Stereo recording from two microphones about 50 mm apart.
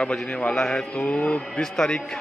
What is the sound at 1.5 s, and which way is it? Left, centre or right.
Speech, centre.